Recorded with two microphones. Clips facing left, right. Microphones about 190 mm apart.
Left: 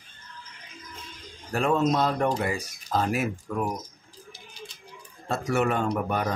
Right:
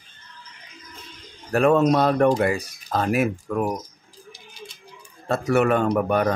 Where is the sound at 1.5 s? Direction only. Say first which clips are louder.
Right 6 dB; 65° right (ahead or behind).